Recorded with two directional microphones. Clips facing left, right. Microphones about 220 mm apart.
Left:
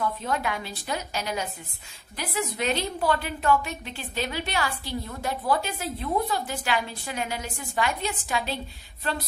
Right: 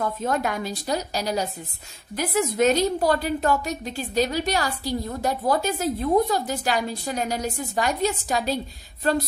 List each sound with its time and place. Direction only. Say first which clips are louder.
0.0 s a woman's voice: right 3 dB; 45° right (ahead or behind)